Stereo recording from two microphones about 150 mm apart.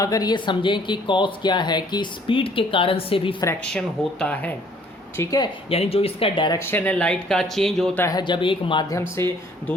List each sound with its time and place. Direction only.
0.0 s speech: 25° left (ahead or behind)
3.7 s speech: 5° left (ahead or behind)
5.1 s a woman's voice: 20° left (ahead or behind)
5.7 s speech: 40° left (ahead or behind)
6.7 s speech: 10° left (ahead or behind)
7.9 s a woman's voice: 20° left (ahead or behind)
8.2 s speech: 35° left (ahead or behind)
9.0 s speech: 15° left (ahead or behind)